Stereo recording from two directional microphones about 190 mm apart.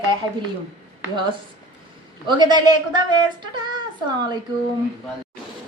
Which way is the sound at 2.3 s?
25° right (ahead or behind).